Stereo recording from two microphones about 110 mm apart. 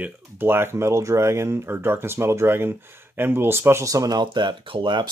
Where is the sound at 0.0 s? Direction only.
20° right (ahead or behind).